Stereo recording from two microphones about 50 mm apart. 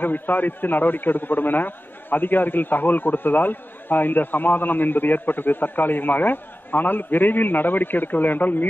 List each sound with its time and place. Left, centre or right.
0.0 s a man's voice: left